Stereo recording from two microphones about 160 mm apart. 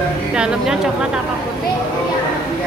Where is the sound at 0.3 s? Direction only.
5° right (ahead or behind).